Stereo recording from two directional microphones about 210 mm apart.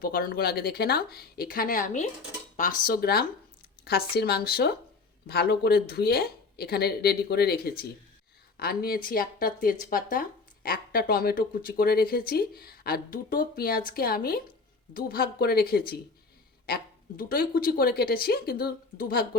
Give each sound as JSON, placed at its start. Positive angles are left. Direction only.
{"t": 0.0, "sound": "speech", "side_deg": 45}